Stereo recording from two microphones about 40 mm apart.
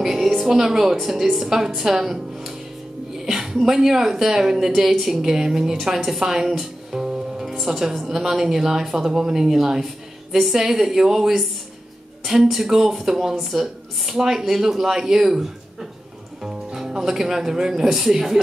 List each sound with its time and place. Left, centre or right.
0.0 s music: centre
0.9 s speech: centre
1.8 s music: centre
3.3 s a woman's voice: centre
16.4 s music: centre
17.0 s speech: centre